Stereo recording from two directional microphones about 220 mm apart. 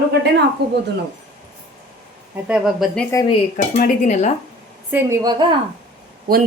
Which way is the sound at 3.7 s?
35° left (ahead or behind).